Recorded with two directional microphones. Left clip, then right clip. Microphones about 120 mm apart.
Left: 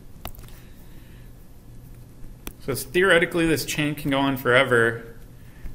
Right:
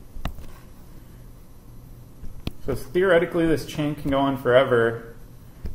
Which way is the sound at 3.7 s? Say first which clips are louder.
Even; 55° left (ahead or behind).